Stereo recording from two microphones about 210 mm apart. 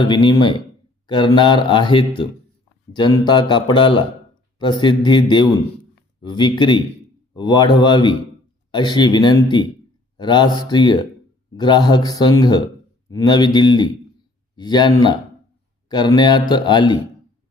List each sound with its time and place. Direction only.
0.0 s speech: 20° left (ahead or behind)